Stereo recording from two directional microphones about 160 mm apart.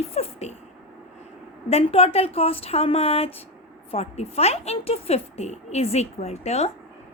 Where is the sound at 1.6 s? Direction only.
40° left (ahead or behind).